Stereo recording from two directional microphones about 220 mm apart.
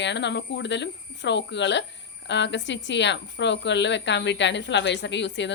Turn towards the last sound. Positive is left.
turn(degrees=55)  # may be behind; listen again after turning